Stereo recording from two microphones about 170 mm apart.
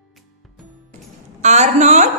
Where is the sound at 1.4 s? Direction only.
40° right (ahead or behind).